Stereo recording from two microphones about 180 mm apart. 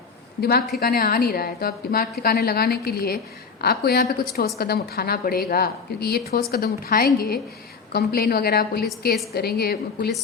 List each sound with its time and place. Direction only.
0.8 s a woman's voice: 55° left (ahead or behind)